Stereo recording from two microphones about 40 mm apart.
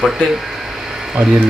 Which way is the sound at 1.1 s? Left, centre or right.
Centre.